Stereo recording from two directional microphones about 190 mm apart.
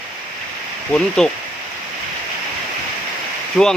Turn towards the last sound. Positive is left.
turn(degrees=0)  # may be behind; listen again after turning